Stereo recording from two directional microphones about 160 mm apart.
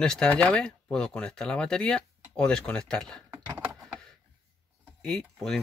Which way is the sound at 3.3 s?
15° right (ahead or behind).